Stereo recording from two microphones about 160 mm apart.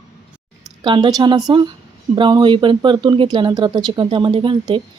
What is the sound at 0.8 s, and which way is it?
Speech, 30° right (ahead or behind).